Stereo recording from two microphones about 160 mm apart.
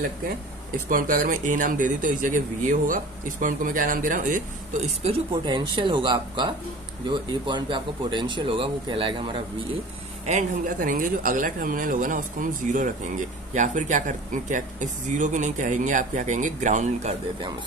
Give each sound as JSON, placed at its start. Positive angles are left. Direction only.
{"t": 0.8, "sound": "speech", "side_deg": -60}
{"t": 5.3, "sound": "speech", "side_deg": -30}
{"t": 10.2, "sound": "speech", "side_deg": -50}